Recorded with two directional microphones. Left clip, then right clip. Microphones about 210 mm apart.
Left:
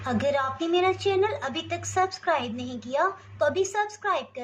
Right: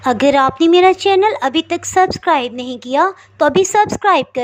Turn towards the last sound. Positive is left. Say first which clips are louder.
# right 15 dB
turn(degrees=-45)  # may be behind; listen again after turning